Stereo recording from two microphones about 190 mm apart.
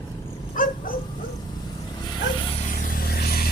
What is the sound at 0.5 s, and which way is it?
Dog, 45° left (ahead or behind).